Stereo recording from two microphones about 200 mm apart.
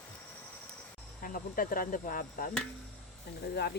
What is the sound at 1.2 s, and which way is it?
Speech, 45° left (ahead or behind).